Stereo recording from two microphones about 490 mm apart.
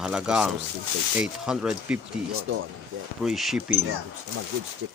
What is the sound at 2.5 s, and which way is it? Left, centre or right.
Speech, right.